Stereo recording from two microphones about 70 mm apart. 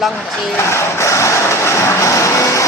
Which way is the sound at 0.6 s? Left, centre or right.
Left.